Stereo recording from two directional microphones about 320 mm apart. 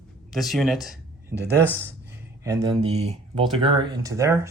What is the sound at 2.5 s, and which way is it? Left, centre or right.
Speech, centre.